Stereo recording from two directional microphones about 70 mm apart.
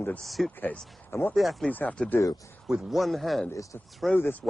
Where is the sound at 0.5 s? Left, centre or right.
Left.